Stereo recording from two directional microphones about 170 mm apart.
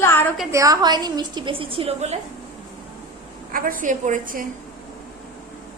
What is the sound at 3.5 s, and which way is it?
Speech, 55° right (ahead or behind).